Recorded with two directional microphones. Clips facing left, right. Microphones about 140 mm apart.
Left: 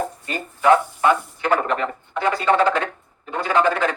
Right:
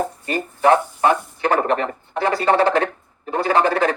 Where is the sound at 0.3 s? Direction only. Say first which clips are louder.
Even; 35° right (ahead or behind).